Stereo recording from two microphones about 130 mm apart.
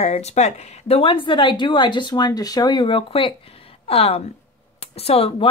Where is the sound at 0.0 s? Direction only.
60° left (ahead or behind).